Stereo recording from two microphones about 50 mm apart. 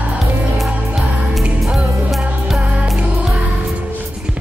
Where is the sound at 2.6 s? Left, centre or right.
Right.